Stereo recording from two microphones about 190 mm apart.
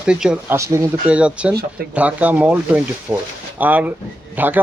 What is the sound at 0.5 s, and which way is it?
Speech, 15° right (ahead or behind).